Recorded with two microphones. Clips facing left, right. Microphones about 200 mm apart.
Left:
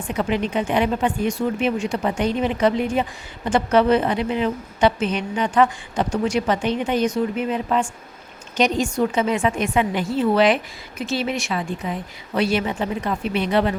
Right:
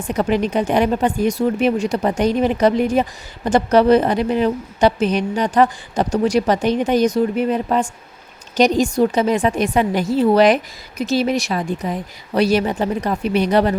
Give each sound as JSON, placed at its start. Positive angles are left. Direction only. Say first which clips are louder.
{"t": 0.1, "sound": "speech", "louder": "right 4 dB", "side_deg": -40}